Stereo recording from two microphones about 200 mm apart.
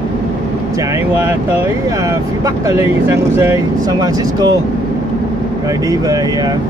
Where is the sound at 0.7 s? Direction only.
15° right (ahead or behind).